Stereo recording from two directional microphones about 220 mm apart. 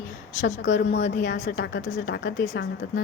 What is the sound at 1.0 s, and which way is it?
Speech, 30° left (ahead or behind).